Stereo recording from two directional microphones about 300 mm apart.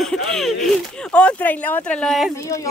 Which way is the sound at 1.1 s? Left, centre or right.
Centre.